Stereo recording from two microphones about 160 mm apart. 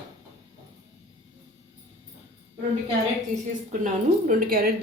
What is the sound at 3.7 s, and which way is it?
A woman's voice, 55° right (ahead or behind).